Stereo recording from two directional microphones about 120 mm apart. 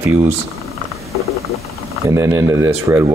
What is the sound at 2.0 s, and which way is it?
Speech, 25° right (ahead or behind).